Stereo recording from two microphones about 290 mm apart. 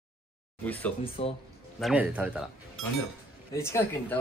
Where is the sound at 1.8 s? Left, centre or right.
Centre.